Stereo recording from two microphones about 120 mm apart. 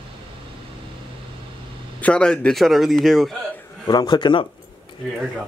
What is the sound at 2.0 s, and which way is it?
Speech, 10° left (ahead or behind).